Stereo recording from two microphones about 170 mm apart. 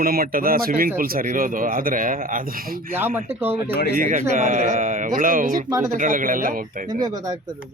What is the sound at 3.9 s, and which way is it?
Speech, 50° right (ahead or behind).